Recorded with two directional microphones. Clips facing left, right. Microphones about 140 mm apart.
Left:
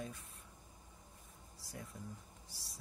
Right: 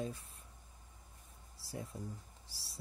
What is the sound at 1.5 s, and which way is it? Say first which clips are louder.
Speech: right 5 dB; 30° right (ahead or behind).